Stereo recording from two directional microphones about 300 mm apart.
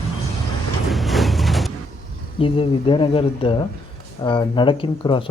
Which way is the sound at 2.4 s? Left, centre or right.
Centre.